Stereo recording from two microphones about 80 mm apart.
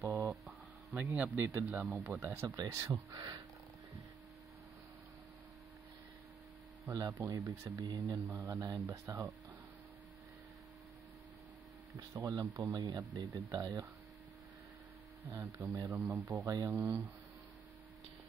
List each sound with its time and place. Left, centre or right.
0.1 s a sound: right
0.9 s a man's voice: centre
2.4 s speech: right
3.1 s speech: right
6.9 s speech: right
8.4 s speech: right
8.8 s a man's voice: right
12.3 s speech: right
15.3 s speech: right
16.0 s a man's voice: right
16.3 s speech: right
16.6 s speech: right